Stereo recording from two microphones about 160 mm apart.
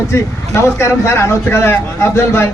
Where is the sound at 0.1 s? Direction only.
15° left (ahead or behind).